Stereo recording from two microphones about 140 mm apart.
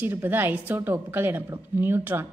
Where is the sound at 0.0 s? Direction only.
15° right (ahead or behind).